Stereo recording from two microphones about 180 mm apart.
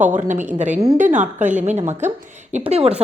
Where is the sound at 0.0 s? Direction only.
40° right (ahead or behind).